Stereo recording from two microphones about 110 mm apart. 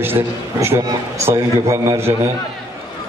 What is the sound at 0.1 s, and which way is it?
Speech, 20° right (ahead or behind).